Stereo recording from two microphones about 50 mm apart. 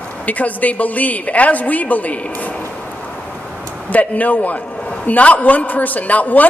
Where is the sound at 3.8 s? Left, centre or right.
Left.